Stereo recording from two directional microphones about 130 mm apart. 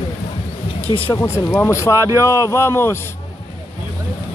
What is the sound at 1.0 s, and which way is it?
Speech, 20° left (ahead or behind).